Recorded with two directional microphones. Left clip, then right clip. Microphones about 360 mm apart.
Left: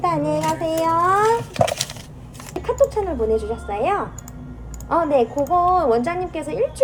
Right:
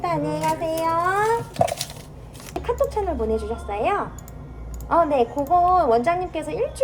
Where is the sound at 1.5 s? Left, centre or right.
Left.